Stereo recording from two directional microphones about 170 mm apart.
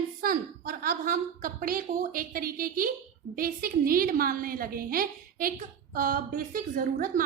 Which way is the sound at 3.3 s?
55° right (ahead or behind).